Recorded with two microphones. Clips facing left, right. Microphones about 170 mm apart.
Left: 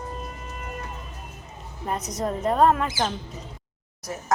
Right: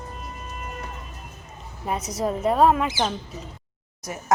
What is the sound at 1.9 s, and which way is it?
A woman's voice, 5° right (ahead or behind).